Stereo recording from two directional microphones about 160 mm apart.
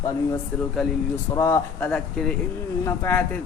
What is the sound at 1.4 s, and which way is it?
Speech, 15° left (ahead or behind).